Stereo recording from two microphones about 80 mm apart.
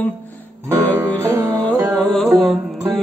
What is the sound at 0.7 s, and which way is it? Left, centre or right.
Music, right.